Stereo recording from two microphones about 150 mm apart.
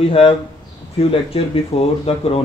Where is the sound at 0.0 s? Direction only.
40° left (ahead or behind).